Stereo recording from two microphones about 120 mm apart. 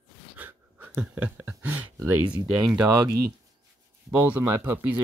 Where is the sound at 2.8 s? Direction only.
30° right (ahead or behind).